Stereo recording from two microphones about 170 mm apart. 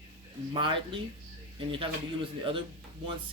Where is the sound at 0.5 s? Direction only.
30° right (ahead or behind).